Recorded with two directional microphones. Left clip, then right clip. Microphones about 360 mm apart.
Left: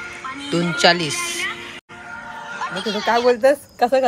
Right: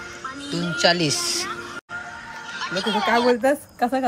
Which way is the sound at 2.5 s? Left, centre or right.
Centre.